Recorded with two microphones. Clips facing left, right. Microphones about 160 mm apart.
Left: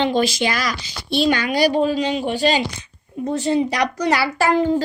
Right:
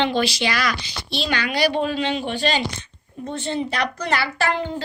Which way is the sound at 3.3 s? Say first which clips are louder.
Left 7 dB; 35° left (ahead or behind).